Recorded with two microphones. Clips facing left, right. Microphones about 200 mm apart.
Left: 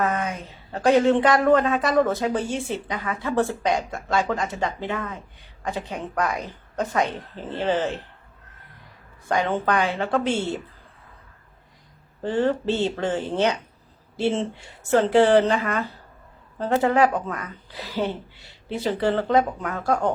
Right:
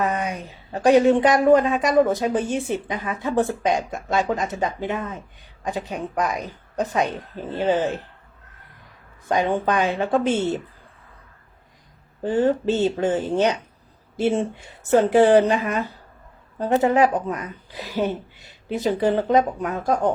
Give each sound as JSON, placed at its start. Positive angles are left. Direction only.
{"t": 0.0, "sound": "a sound", "side_deg": -15}
{"t": 1.5, "sound": "a woman's voice", "side_deg": -15}
{"t": 9.3, "sound": "a woman's voice", "side_deg": -15}
{"t": 12.2, "sound": "a woman's voice", "side_deg": -15}